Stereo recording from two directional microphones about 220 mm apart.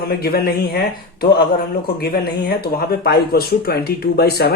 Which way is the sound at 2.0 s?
45° left (ahead or behind).